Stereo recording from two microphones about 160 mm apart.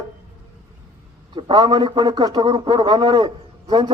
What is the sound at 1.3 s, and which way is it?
A man's voice, 30° right (ahead or behind).